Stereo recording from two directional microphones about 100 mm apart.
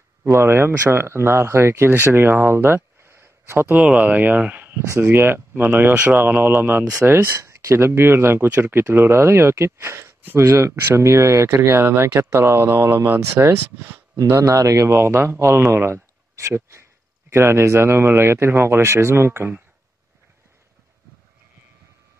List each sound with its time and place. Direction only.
0.2 s speech: 25° right (ahead or behind)
13.7 s speech: 20° right (ahead or behind)
14.1 s speech: 35° right (ahead or behind)